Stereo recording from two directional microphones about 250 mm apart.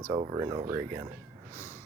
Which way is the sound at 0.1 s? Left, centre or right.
Centre.